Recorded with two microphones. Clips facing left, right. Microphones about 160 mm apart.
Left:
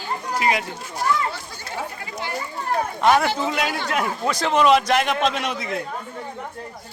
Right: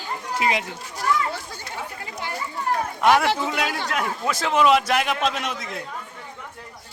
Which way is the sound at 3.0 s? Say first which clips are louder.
Even; centre (ahead or behind).